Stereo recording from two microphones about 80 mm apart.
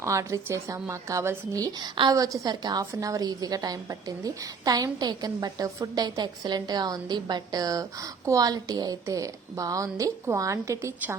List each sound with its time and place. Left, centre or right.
0.0 s a woman's voice: right
1.5 s a woman's voice: right
2.9 s a woman's voice: right